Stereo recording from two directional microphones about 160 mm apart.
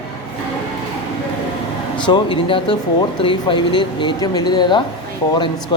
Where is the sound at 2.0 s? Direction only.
30° left (ahead or behind).